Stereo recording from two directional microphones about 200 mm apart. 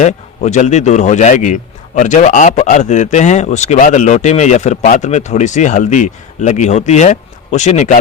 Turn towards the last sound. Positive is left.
turn(degrees=35)  # may be behind; listen again after turning